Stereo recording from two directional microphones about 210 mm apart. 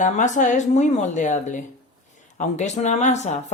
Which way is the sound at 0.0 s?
35° left (ahead or behind).